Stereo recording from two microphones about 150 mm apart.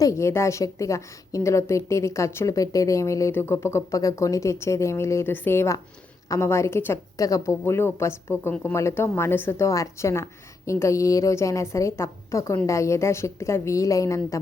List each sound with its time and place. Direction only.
0.0 s a woman's voice: 20° left (ahead or behind)